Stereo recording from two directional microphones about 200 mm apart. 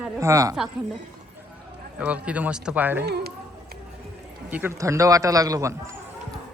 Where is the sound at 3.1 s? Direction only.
55° right (ahead or behind).